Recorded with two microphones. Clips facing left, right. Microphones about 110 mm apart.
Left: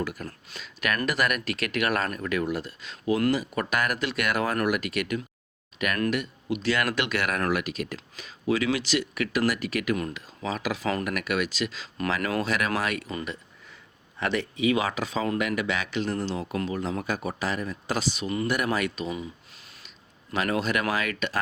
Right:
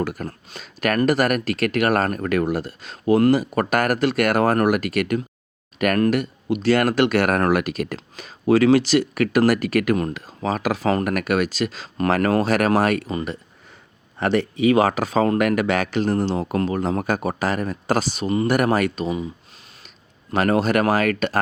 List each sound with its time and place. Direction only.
0.0 s speech: 50° right (ahead or behind)
0.3 s speech: 40° right (ahead or behind)
13.2 s a sound: 45° right (ahead or behind)
14.2 s speech: 40° right (ahead or behind)
18.5 s speech: 45° right (ahead or behind)
20.4 s speech: 45° right (ahead or behind)